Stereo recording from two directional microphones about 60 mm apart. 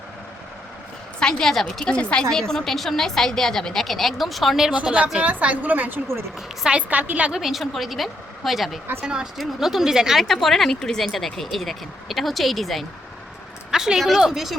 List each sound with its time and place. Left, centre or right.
1.2 s a woman's voice: centre
1.8 s speech: centre
4.7 s a woman's voice: right
7.3 s speech: centre
10.2 s speech: centre